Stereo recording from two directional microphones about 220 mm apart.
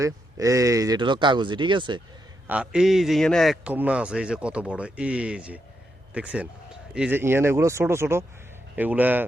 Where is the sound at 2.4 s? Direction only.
5° right (ahead or behind).